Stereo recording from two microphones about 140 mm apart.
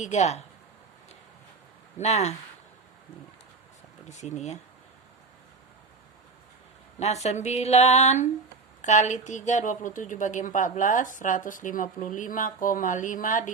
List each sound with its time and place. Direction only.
0.0 s speech: 55° left (ahead or behind)
2.0 s speech: 50° left (ahead or behind)
4.1 s speech: 55° left (ahead or behind)
7.0 s a woman's voice: 50° left (ahead or behind); by 13.5 s 70° left (ahead or behind)